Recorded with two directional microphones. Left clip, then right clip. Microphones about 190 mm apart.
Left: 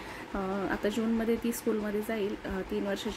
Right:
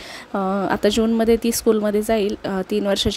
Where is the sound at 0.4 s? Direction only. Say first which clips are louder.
Right 12 dB; 45° right (ahead or behind).